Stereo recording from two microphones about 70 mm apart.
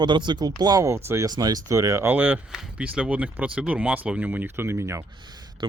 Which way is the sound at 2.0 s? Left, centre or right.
Right.